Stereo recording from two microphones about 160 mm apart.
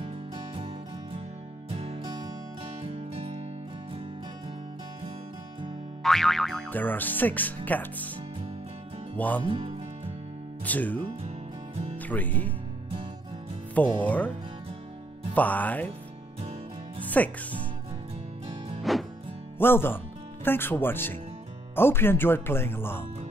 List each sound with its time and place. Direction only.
1.7 s music: 40° right (ahead or behind)
6.0 s speech: centre (ahead or behind)
9.1 s speech: 10° left (ahead or behind)
9.5 s speech: 35° right (ahead or behind)
10.6 s speech: 10° left (ahead or behind)
11.2 s music: 40° right (ahead or behind)
12.0 s speech: 10° left (ahead or behind)
13.7 s speech: 10° left (ahead or behind)
15.3 s speech: 10° left (ahead or behind)
17.0 s speech: 10° left (ahead or behind)
18.8 s music: centre (ahead or behind)
19.6 s speech: 15° left (ahead or behind)